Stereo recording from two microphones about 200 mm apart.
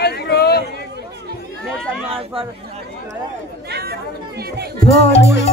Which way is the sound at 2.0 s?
30° right (ahead or behind).